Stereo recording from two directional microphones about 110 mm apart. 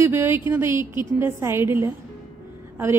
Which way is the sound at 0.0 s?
20° right (ahead or behind).